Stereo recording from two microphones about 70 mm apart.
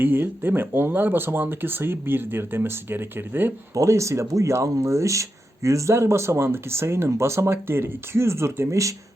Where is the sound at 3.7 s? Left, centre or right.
Right.